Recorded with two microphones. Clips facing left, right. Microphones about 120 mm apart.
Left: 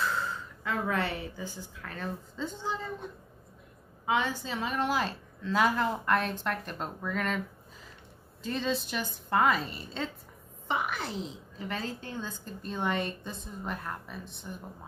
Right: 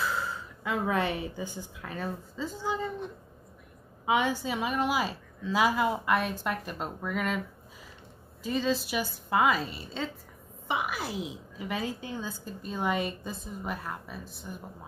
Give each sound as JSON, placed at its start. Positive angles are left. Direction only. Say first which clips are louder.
{"t": 0.0, "sound": "a sound", "louder": "even", "side_deg": -5}
{"t": 0.8, "sound": "a woman's voice", "louder": "right 4 dB", "side_deg": -15}
{"t": 4.0, "sound": "a woman's voice", "louder": "right 3 dB", "side_deg": -15}